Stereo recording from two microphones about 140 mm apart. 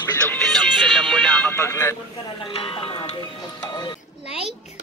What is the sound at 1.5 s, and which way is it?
Speech, 20° left (ahead or behind).